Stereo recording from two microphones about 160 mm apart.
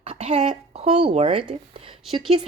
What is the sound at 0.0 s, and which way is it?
Speech, 35° right (ahead or behind).